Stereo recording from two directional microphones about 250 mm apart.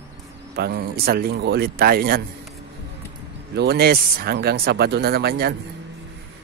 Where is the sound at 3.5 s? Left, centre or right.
Right.